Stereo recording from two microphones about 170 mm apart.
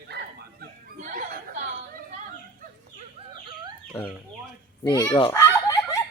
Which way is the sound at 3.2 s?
30° right (ahead or behind).